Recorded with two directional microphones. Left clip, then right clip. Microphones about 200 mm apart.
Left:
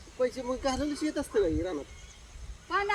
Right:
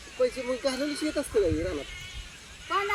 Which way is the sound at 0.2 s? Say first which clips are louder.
Right 3 dB; 25° left (ahead or behind).